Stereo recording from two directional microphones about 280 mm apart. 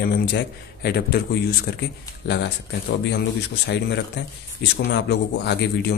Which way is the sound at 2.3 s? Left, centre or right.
Left.